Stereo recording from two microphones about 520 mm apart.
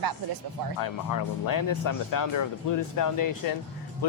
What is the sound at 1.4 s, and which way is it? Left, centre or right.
Speech, left.